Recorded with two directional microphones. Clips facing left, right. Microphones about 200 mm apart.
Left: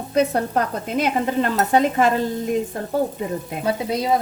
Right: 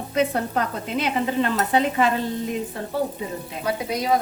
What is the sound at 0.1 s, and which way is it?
Stir, 40° left (ahead or behind).